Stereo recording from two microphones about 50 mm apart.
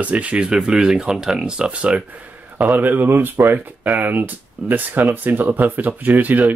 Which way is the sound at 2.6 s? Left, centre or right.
Right.